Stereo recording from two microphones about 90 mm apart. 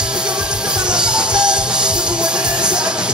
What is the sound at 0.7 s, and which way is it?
Music, 10° right (ahead or behind).